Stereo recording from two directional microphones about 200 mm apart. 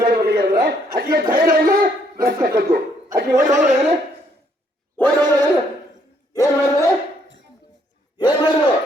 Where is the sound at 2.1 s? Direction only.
50° right (ahead or behind).